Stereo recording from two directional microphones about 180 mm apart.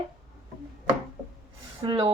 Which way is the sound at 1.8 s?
25° right (ahead or behind).